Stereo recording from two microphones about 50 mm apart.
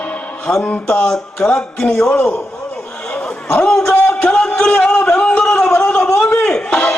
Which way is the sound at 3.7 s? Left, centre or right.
Centre.